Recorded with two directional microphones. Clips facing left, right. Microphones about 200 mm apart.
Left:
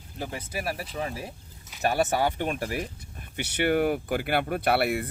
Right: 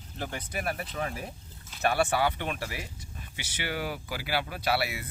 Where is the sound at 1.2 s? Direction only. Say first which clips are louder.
Left 1 dB; 10° left (ahead or behind).